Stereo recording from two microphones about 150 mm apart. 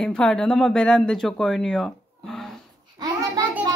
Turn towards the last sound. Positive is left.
turn(degrees=-25)  # may be behind; listen again after turning